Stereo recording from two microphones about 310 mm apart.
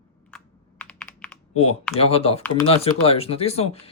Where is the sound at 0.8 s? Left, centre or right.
Centre.